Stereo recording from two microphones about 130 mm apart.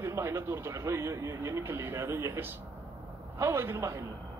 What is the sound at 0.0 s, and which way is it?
Speech, 20° right (ahead or behind).